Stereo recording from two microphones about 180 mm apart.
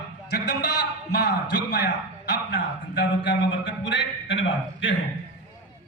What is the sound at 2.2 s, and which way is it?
A man's voice, 75° left (ahead or behind).